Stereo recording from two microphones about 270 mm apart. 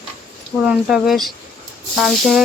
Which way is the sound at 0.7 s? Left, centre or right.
Centre.